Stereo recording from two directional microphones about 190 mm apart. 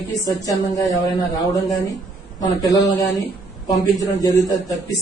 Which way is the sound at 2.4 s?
20° left (ahead or behind).